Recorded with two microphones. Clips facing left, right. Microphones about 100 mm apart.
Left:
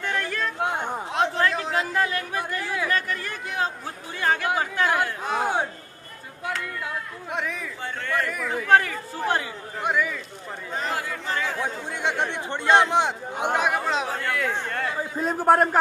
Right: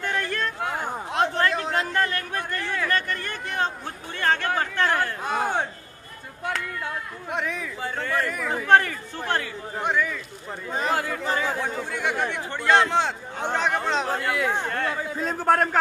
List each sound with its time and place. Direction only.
0.0 s yodeling: centre (ahead or behind)
0.6 s a sound: 25° left (ahead or behind)
0.8 s a sound: centre (ahead or behind)
4.2 s chatter: 10° left (ahead or behind)
7.2 s speech: centre (ahead or behind)
10.9 s speech: 60° right (ahead or behind)
11.6 s speech: 20° left (ahead or behind); by 14.1 s 5° left (ahead or behind)
14.1 s speech: 10° right (ahead or behind)
15.1 s speech: 10° left (ahead or behind)